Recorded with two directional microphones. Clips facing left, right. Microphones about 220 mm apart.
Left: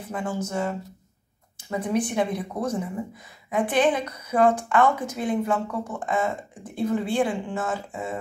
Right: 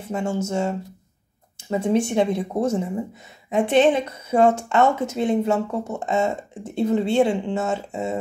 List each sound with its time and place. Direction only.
0.0 s speech: 25° right (ahead or behind)